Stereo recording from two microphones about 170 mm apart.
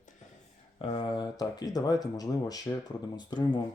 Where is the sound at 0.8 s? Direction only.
30° left (ahead or behind).